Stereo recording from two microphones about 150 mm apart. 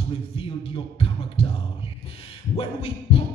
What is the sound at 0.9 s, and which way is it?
Music, 40° left (ahead or behind).